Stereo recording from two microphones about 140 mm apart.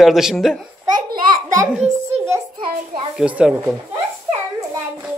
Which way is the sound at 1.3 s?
25° right (ahead or behind).